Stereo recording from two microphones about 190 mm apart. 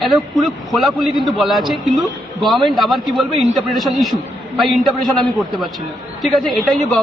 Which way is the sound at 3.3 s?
35° right (ahead or behind).